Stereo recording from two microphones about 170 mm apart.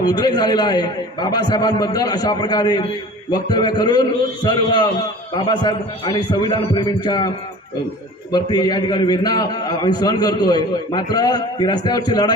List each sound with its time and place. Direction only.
0.0 s a man's voice: 25° left (ahead or behind)
8.3 s a man's voice: 25° left (ahead or behind)